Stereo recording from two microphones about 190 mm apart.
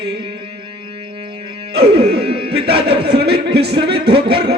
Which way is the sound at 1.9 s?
30° right (ahead or behind).